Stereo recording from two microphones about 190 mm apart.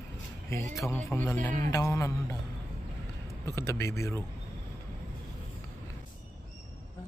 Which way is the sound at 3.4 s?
15° left (ahead or behind).